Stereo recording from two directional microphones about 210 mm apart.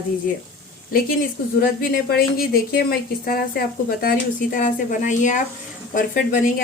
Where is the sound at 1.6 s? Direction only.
45° left (ahead or behind).